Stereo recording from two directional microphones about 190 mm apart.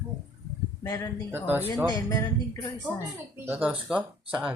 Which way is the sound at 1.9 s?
20° left (ahead or behind).